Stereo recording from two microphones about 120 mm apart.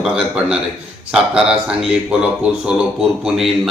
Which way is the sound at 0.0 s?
5° right (ahead or behind).